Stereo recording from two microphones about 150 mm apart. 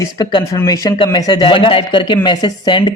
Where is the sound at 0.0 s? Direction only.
25° left (ahead or behind).